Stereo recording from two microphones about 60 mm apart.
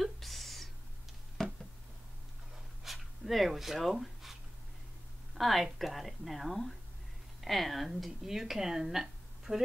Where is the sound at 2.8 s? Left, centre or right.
Centre.